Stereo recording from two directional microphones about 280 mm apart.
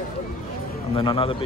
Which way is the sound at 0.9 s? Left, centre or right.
Centre.